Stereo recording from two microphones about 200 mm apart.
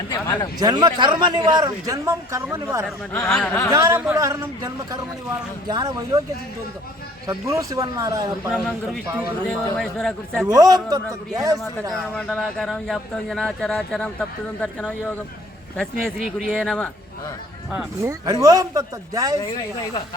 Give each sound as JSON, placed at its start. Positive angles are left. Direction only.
{"t": 0.1, "sound": "speech", "side_deg": 20}
{"t": 0.6, "sound": "a man's voice", "side_deg": -20}
{"t": 3.1, "sound": "speech", "side_deg": 5}
{"t": 3.7, "sound": "a man's voice", "side_deg": -15}
{"t": 7.3, "sound": "speech", "side_deg": -15}
{"t": 8.5, "sound": "speech", "side_deg": 0}
{"t": 10.5, "sound": "speech", "side_deg": -20}
{"t": 11.5, "sound": "speech", "side_deg": 0}
{"t": 17.7, "sound": "speech", "side_deg": -10}